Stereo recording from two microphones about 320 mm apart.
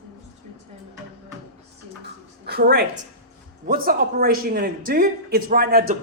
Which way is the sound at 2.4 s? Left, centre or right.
Right.